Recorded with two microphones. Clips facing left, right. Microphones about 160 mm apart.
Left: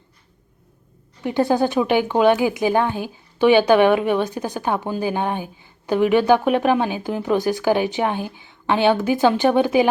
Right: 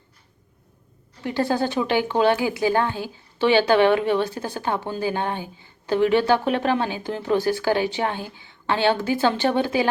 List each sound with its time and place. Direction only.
1.2 s speech: 20° left (ahead or behind)